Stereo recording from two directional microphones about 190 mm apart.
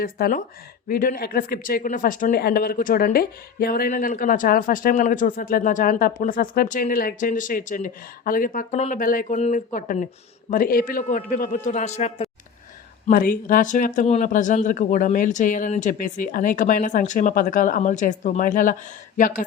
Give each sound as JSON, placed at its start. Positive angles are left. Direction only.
{"t": 0.0, "sound": "speech", "side_deg": 45}
{"t": 13.1, "sound": "speech", "side_deg": 45}